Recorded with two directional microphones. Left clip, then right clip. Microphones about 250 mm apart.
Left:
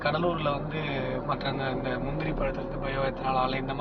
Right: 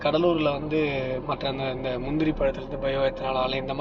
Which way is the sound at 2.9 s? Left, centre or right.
Right.